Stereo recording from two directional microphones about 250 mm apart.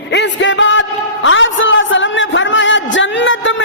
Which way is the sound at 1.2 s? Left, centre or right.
Left.